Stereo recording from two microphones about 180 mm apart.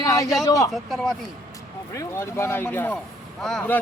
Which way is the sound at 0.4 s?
20° left (ahead or behind).